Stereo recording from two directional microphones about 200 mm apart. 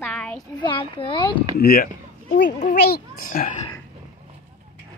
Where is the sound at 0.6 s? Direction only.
25° left (ahead or behind).